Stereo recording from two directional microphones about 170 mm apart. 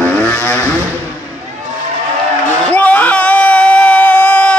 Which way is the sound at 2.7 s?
10° left (ahead or behind).